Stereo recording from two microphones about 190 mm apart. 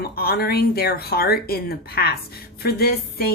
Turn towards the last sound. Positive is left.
turn(degrees=55)  # may be behind; listen again after turning